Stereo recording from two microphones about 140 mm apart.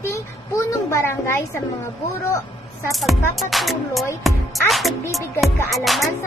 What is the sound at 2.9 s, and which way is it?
Music, centre (ahead or behind).